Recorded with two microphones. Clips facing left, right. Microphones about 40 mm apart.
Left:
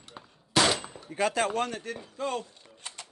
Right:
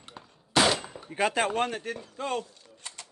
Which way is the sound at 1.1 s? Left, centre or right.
Right.